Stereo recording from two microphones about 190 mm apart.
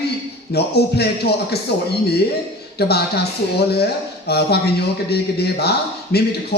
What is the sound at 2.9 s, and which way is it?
Speech, 60° left (ahead or behind).